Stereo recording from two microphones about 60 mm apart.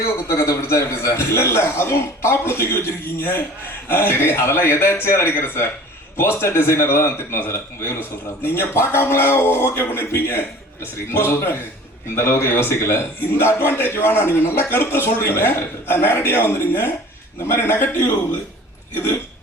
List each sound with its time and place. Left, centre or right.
0.0 s a man's voice: left